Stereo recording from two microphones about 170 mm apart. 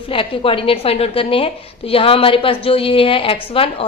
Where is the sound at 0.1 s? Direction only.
30° left (ahead or behind).